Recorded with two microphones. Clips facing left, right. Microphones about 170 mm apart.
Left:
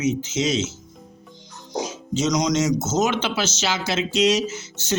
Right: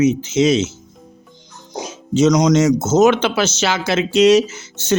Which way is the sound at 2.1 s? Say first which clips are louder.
Right 9 dB; 60° right (ahead or behind).